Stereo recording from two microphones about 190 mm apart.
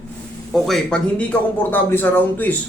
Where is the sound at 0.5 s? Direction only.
Centre (ahead or behind).